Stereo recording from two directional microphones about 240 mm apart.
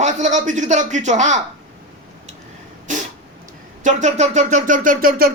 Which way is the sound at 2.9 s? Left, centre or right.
Right.